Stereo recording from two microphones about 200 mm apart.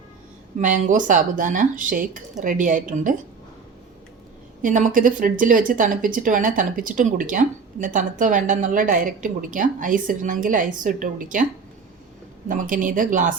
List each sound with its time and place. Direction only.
0.6 s speech: 40° right (ahead or behind)
4.6 s speech: 40° right (ahead or behind)
12.5 s speech: 40° right (ahead or behind)